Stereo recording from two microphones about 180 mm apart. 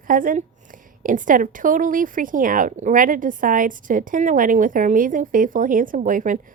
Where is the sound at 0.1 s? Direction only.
50° right (ahead or behind).